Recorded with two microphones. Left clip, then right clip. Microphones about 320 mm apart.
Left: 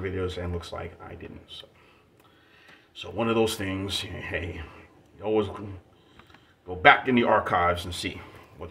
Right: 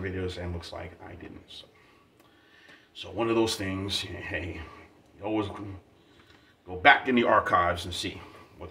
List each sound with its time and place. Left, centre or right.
0.0 s speech: centre
2.9 s speech: centre
6.8 s speech: centre